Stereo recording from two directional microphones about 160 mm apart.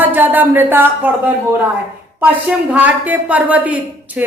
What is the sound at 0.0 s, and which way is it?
Speech, 10° right (ahead or behind).